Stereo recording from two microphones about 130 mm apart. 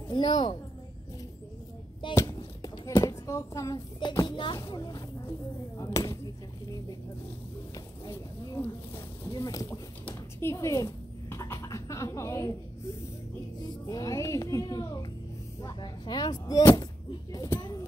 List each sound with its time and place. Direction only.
0.1 s child singing: 35° left (ahead or behind)
2.1 s speech: 30° left (ahead or behind)
3.7 s child singing: 30° left (ahead or behind)
5.8 s a woman's voice: 25° left (ahead or behind)
7.7 s a woman's voice: 25° left (ahead or behind)
13.8 s a woman's voice: 30° left (ahead or behind)
15.8 s child singing: 35° left (ahead or behind)
16.7 s speech: 30° left (ahead or behind)